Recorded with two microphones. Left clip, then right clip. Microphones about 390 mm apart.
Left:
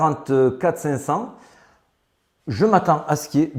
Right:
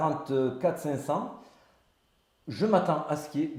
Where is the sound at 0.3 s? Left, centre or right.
Left.